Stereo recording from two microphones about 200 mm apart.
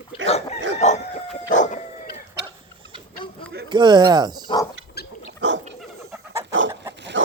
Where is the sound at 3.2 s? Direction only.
25° left (ahead or behind).